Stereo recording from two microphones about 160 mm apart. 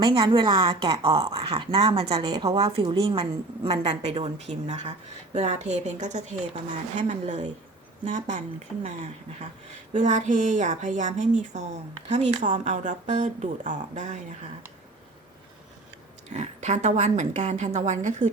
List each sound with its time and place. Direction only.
0.0 s speech: 30° right (ahead or behind)
2.2 s a woman's voice: 25° right (ahead or behind)
2.5 s speech: 40° right (ahead or behind)
16.3 s speech: 45° right (ahead or behind)